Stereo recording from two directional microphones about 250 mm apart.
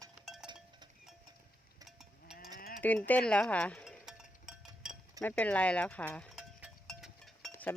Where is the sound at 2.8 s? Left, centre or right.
Centre.